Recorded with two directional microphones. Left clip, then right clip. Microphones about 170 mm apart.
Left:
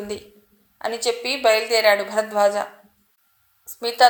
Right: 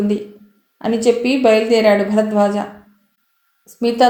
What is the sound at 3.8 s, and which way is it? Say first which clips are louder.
Speech: right 2 dB; 20° left (ahead or behind).